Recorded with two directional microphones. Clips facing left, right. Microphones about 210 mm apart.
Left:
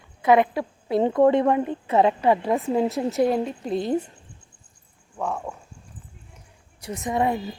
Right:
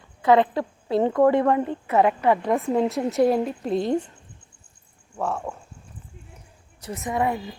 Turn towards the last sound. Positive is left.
turn(degrees=25)  # may be behind; listen again after turning